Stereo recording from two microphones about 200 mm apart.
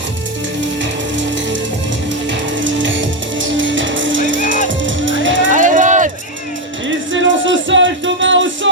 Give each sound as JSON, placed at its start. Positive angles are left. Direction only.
{"t": 2.6, "sound": "music", "side_deg": -70}
{"t": 5.5, "sound": "a sound", "side_deg": -40}
{"t": 6.8, "sound": "music", "side_deg": -70}